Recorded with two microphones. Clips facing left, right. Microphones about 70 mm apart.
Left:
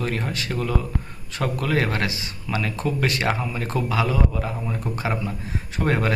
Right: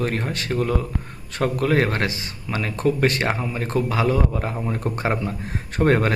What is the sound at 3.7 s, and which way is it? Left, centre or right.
Speech, right.